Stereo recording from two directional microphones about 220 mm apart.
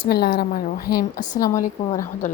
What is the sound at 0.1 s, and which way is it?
A woman's voice, 45° left (ahead or behind).